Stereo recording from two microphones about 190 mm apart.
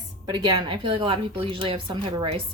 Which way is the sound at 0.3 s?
25° right (ahead or behind).